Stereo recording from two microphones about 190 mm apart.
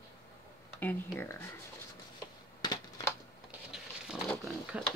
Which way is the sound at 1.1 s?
15° left (ahead or behind).